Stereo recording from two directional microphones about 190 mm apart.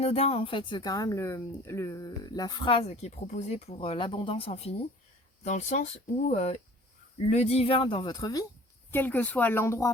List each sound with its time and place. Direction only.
0.0 s speech: 30° left (ahead or behind); by 9.9 s 15° left (ahead or behind)